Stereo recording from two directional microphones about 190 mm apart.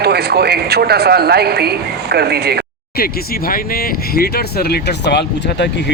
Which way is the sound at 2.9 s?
50° left (ahead or behind).